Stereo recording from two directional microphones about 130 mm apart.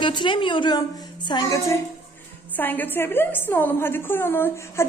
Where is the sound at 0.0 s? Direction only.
40° left (ahead or behind).